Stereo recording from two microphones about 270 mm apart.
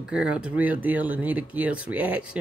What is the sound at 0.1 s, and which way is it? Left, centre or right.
Speech, centre.